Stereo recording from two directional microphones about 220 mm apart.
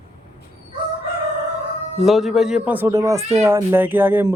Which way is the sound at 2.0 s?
Centre (ahead or behind).